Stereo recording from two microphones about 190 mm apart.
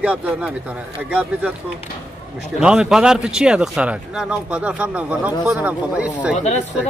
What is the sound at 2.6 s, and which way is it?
A man's voice, 5° right (ahead or behind).